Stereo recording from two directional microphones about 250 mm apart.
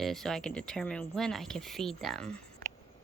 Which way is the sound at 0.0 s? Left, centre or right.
Centre.